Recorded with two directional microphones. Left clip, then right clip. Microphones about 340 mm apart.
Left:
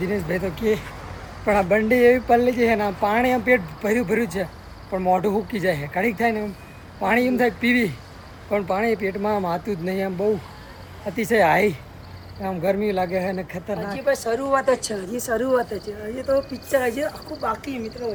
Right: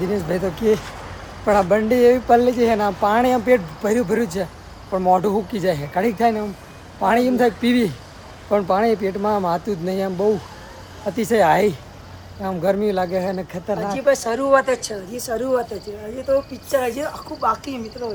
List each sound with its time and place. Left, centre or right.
0.0 s speech: centre
13.9 s speech: right
15.1 s speech: centre